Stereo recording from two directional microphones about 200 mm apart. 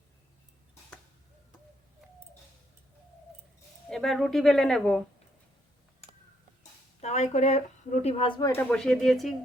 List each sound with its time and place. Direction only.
3.8 s speech: centre (ahead or behind)
6.6 s a sound: 35° left (ahead or behind)
8.0 s speech: 25° left (ahead or behind)
8.7 s speech: centre (ahead or behind)